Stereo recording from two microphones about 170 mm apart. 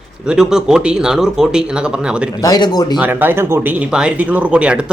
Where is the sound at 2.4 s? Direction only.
25° left (ahead or behind).